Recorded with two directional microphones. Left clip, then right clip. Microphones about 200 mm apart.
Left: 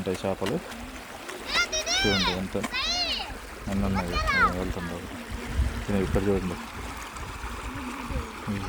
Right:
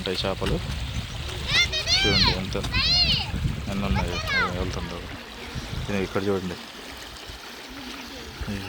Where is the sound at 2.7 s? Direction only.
60° left (ahead or behind).